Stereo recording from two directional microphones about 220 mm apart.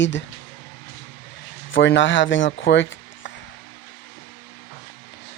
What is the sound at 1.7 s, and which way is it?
Speech, 55° left (ahead or behind).